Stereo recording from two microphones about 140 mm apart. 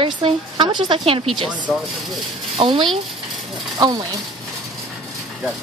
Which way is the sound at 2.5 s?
35° right (ahead or behind).